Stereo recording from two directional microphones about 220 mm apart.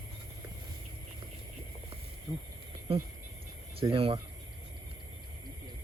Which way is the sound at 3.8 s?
25° right (ahead or behind).